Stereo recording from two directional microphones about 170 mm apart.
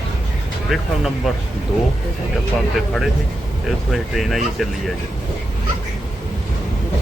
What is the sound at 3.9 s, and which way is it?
Speech, centre (ahead or behind).